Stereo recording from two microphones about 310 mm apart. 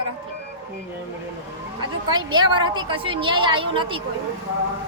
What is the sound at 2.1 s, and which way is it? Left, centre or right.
A woman's voice, centre.